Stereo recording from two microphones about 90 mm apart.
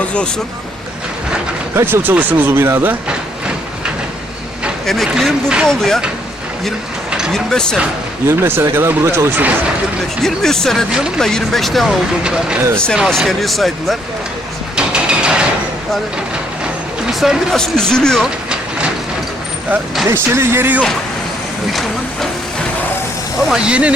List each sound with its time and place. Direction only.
0.0 s speech: 15° left (ahead or behind)
1.7 s speech: 25° right (ahead or behind)
5.0 s speech: 5° right (ahead or behind)
5.6 s speech: 5° left (ahead or behind)
7.3 s speech: 5° left (ahead or behind)
8.3 s speech: 25° right (ahead or behind)
10.2 s speech: 5° left (ahead or behind)
12.2 s speech: 10° right (ahead or behind)
12.7 s speech: 10° left (ahead or behind)
14.8 s a sound: 10° right (ahead or behind)
17.1 s speech: centre (ahead or behind)
20.1 s speech: 25° right (ahead or behind)
21.7 s hiss: centre (ahead or behind)
23.6 s speech: 15° right (ahead or behind)